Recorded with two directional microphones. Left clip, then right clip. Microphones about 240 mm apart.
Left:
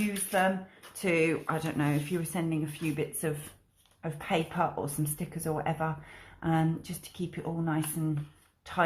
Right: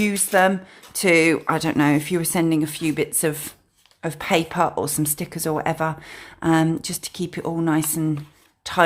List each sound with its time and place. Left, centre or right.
0.3 s speech: right